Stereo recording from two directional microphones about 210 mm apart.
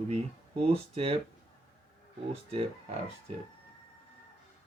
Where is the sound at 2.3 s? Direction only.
30° right (ahead or behind).